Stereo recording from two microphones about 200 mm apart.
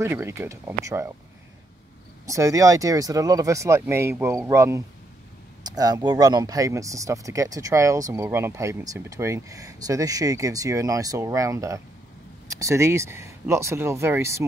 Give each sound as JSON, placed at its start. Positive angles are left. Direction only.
{"t": 0.0, "sound": "speech", "side_deg": -15}
{"t": 2.2, "sound": "speech", "side_deg": -15}